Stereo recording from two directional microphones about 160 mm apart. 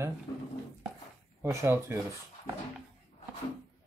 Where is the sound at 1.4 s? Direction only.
15° right (ahead or behind).